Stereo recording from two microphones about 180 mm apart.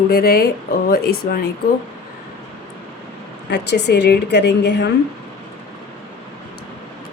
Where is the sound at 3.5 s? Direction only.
70° left (ahead or behind).